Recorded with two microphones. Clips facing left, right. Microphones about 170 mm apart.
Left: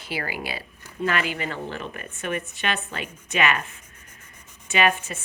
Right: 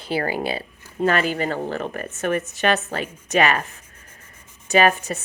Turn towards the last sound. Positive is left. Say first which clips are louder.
# right 5 dB
turn(degrees=-40)  # may be behind; listen again after turning